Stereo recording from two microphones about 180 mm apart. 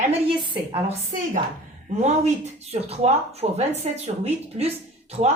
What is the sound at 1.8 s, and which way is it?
A woman's voice, 40° right (ahead or behind).